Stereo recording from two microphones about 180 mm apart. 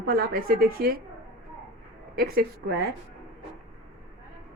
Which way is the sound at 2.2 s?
55° right (ahead or behind).